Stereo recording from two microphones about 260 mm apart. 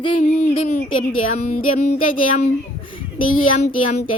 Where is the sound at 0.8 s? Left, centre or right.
Left.